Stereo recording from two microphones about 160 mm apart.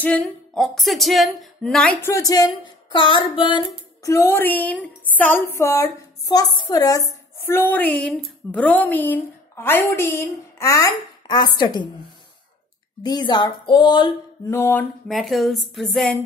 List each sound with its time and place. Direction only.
0.0 s speech: 5° left (ahead or behind); by 4.1 s 30° left (ahead or behind)
4.1 s a woman's voice: 15° left (ahead or behind)
13.0 s speech: 25° left (ahead or behind)
14.5 s a woman's voice: 15° left (ahead or behind)
15.0 s speech: centre (ahead or behind)